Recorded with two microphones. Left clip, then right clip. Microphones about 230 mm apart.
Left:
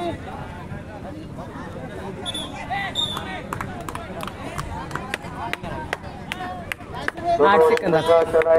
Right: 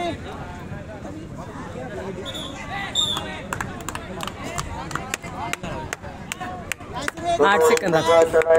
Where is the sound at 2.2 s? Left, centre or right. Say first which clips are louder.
Left 2 dB; left.